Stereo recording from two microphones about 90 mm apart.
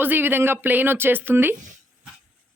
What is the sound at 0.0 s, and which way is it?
Speech, 25° right (ahead or behind).